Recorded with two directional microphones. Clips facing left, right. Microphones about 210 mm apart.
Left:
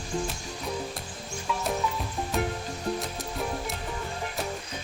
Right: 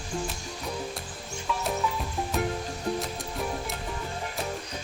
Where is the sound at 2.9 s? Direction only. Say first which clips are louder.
Right 1 dB; centre (ahead or behind).